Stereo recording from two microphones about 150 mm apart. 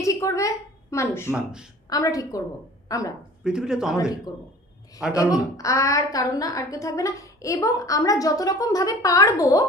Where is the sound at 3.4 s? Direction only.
5° right (ahead or behind).